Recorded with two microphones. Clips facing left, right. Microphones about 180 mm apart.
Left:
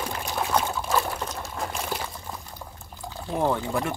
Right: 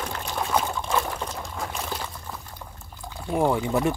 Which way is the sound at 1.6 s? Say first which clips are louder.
Left 2 dB; centre (ahead or behind).